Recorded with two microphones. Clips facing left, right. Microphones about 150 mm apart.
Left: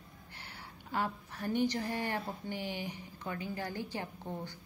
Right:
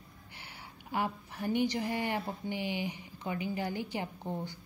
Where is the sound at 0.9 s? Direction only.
10° right (ahead or behind).